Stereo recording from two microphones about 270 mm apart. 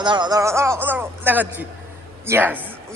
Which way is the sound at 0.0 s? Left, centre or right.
Centre.